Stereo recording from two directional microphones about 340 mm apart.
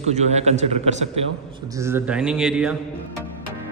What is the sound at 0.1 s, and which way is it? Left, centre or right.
Speech, centre.